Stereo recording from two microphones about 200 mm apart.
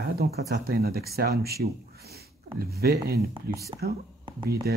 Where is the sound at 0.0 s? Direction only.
50° right (ahead or behind).